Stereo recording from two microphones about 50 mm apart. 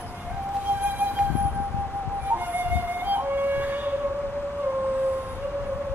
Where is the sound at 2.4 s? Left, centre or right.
Right.